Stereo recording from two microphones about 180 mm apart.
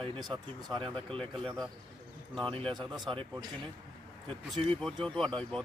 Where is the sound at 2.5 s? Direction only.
25° right (ahead or behind).